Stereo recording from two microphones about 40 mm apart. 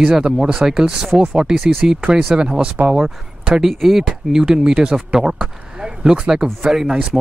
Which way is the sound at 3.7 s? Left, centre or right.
Centre.